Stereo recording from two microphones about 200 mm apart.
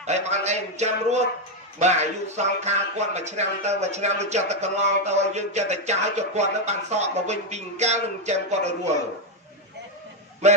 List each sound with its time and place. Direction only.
0.0 s speech: 35° right (ahead or behind)